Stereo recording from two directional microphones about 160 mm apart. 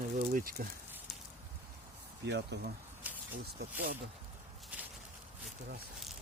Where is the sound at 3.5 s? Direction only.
80° right.